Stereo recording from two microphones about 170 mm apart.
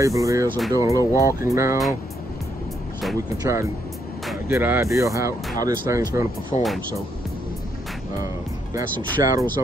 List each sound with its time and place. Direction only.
0.0 s speech: 20° right (ahead or behind)
3.2 s speech: 20° right (ahead or behind)
6.5 s speech: 40° left (ahead or behind)
9.1 s speech: 20° right (ahead or behind)